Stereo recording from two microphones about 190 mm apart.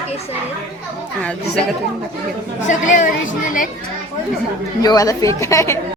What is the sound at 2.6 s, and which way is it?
A woman's voice, 40° left (ahead or behind).